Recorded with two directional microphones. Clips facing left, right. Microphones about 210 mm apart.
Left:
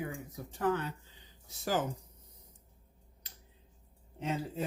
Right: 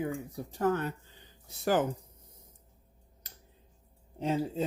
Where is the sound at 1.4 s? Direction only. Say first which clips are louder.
Right 5 dB; 60° right (ahead or behind).